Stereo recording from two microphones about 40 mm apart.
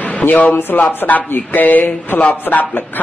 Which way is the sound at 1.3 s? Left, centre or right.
Left.